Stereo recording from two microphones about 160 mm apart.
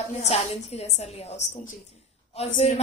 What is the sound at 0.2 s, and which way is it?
A woman's voice, 40° left (ahead or behind).